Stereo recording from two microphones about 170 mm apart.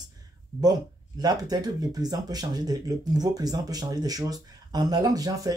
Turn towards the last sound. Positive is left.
turn(degrees=-20)  # may be behind; listen again after turning